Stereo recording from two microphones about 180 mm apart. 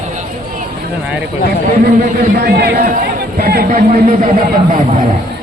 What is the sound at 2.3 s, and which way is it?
A man's voice, 65° right (ahead or behind).